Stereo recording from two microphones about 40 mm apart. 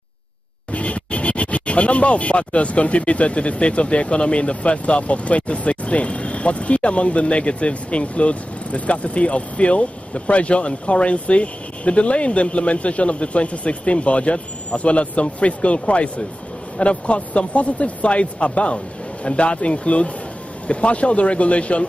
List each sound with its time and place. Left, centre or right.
0.7 s speech: left